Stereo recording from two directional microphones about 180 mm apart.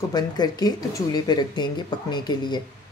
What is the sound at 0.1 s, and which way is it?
A woman's voice, 20° left (ahead or behind).